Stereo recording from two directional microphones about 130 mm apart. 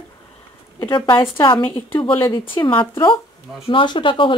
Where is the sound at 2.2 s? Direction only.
35° left (ahead or behind).